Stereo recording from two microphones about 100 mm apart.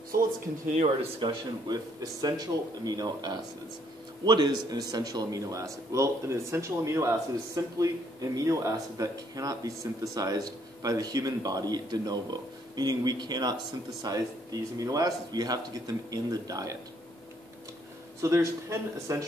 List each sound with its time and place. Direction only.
1.2 s a man's voice: 40° right (ahead or behind)
18.2 s a man's voice: 30° right (ahead or behind)